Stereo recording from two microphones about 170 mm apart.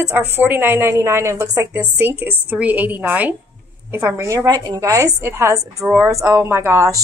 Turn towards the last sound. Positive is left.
turn(degrees=-15)  # may be behind; listen again after turning